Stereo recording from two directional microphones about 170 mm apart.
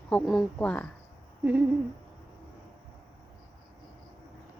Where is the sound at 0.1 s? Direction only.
5° left (ahead or behind).